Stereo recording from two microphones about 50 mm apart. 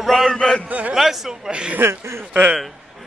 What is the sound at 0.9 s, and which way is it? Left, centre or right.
Speech, centre.